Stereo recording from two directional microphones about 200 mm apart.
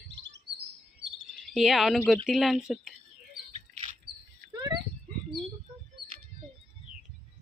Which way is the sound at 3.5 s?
35° right (ahead or behind).